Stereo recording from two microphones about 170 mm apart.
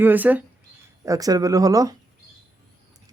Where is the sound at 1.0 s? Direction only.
20° right (ahead or behind).